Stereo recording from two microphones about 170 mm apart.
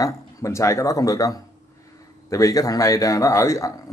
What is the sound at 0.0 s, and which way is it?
A man's voice, 15° left (ahead or behind).